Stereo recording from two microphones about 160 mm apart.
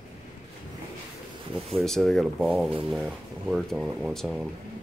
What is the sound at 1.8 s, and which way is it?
Speech, centre (ahead or behind).